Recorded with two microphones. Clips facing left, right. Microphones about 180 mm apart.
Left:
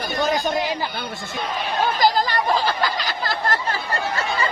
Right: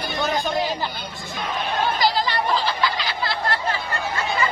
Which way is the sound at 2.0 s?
45° left (ahead or behind).